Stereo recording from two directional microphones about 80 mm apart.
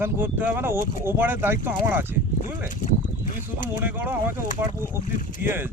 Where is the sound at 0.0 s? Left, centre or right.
Right.